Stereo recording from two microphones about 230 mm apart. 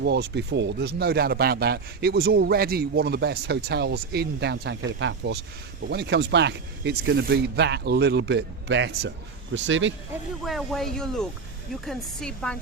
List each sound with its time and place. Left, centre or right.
0.0 s speech: right
10.4 s speech: centre